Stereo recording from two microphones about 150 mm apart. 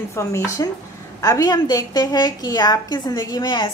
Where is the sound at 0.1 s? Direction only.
20° left (ahead or behind).